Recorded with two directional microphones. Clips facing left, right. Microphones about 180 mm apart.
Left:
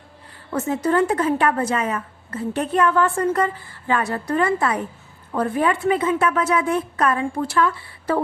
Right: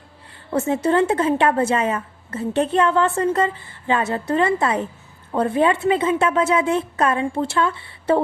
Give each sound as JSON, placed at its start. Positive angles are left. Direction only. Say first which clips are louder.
{"t": 0.5, "sound": "a woman's voice", "louder": "right 2 dB", "side_deg": -25}